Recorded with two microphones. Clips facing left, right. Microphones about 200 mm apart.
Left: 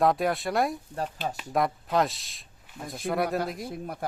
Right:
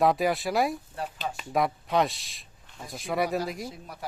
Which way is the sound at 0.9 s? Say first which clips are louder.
Left 2 dB; 40° left (ahead or behind).